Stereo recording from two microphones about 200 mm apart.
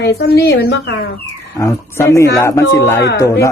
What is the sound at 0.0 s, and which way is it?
Speech, 55° left (ahead or behind).